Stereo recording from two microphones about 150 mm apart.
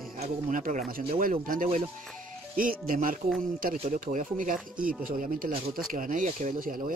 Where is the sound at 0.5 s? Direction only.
60° right (ahead or behind).